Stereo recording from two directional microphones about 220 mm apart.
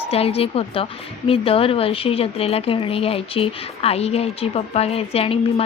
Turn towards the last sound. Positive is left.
turn(degrees=25)  # may be behind; listen again after turning